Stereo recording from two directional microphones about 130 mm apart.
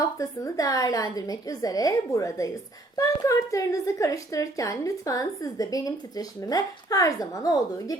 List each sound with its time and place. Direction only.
0.0 s a woman's voice: 25° left (ahead or behind)